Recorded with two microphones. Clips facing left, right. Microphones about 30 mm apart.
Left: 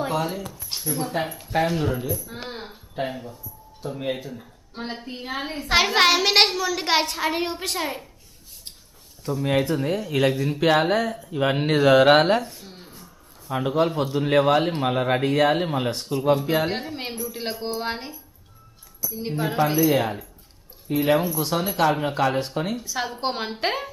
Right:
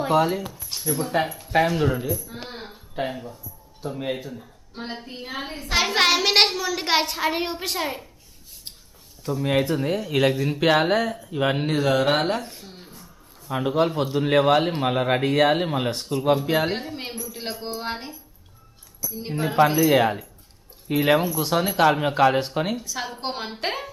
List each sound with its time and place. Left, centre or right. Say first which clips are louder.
0.0 s speech: right 5 dB; centre
0.8 s a man's voice: right 3 dB; centre
2.2 s a sound: left 2 dB; centre
2.9 s a man's voice: even; centre
9.2 s a man's voice: even; centre
11.6 s speech: left 8 dB; centre
12.4 s speech: left 4 dB; centre
12.6 s a sound: even; centre
13.5 s a man's voice: even; centre
20.8 s speech: right 1 dB; centre
21.2 s a man's voice: even; centre
21.5 s speech: right 3 dB; centre
22.8 s a man's voice: left 3 dB; centre